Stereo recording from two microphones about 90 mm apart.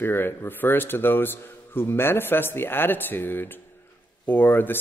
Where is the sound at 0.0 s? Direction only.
25° left (ahead or behind).